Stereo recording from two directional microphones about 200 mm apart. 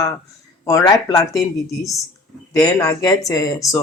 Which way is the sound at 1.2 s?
Centre (ahead or behind).